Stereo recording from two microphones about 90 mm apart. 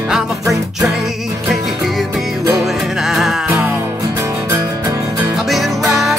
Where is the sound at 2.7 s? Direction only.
5° right (ahead or behind).